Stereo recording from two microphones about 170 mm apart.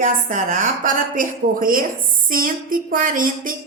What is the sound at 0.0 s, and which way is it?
A woman's voice, 50° right (ahead or behind).